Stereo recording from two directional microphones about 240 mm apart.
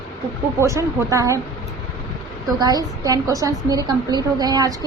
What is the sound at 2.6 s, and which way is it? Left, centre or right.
A woman's voice, centre.